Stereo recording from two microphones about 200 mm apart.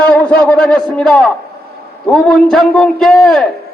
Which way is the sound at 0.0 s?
5° left (ahead or behind).